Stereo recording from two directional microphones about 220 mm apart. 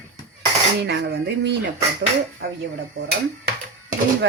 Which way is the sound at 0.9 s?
50° right (ahead or behind).